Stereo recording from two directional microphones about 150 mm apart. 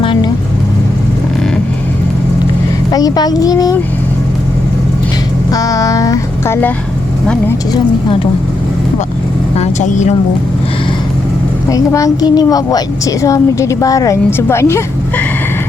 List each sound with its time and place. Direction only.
2.9 s a woman's voice: 25° left (ahead or behind)
5.5 s music: 25° left (ahead or behind)
9.6 s speech: 50° left (ahead or behind)
11.7 s a woman's voice: 20° left (ahead or behind)